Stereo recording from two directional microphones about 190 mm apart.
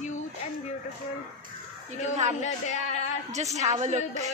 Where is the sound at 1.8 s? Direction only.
35° right (ahead or behind).